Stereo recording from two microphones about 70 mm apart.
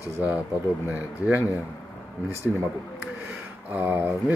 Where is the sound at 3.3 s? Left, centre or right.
Right.